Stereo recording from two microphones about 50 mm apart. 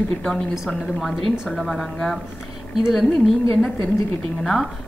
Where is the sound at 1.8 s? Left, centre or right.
Centre.